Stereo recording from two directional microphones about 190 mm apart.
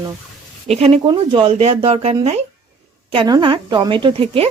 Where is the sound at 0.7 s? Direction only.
30° right (ahead or behind).